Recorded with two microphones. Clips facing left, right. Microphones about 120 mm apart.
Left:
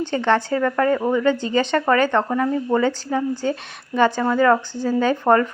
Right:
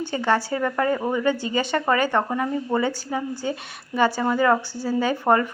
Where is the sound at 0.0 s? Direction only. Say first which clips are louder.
Left 3 dB; 10° right (ahead or behind).